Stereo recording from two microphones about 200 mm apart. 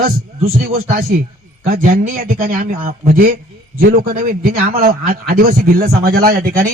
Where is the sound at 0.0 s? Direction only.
50° right (ahead or behind).